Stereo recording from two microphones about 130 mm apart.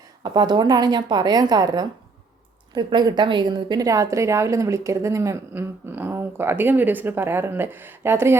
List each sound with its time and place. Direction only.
0.2 s a woman's voice: 35° right (ahead or behind)